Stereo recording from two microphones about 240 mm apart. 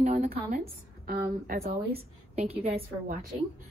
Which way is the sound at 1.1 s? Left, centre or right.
Right.